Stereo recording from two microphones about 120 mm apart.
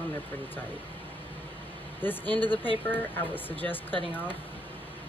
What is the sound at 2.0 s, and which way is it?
Speech, 15° left (ahead or behind).